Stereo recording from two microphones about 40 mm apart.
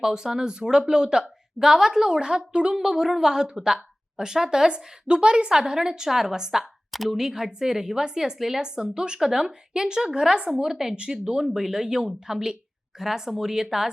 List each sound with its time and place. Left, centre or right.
0.0 s a woman's voice: centre
2.7 s speech: centre
6.9 s speech: centre
8.6 s a woman's voice: centre
10.9 s a woman's voice: right
11.3 s speech: centre